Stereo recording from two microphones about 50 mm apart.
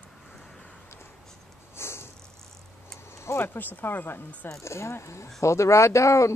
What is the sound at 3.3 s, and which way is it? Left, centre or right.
Speech, left.